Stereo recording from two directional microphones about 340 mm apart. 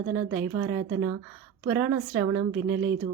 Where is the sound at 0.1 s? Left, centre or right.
Right.